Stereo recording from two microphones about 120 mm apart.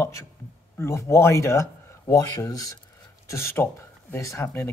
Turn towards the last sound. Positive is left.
turn(degrees=20)  # may be behind; listen again after turning